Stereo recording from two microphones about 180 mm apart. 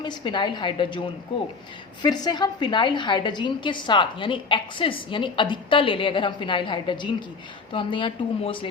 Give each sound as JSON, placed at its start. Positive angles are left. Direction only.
{"t": 0.0, "sound": "a woman's voice", "side_deg": 25}